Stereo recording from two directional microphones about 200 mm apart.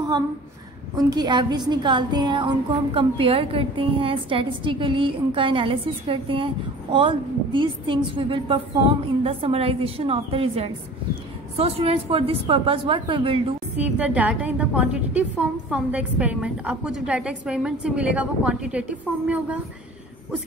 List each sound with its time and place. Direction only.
0.9 s a woman's voice: 20° right (ahead or behind)
13.7 s a woman's voice: 5° right (ahead or behind)